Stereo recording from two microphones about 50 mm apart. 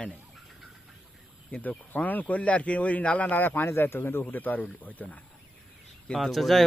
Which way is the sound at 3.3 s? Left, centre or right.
Left.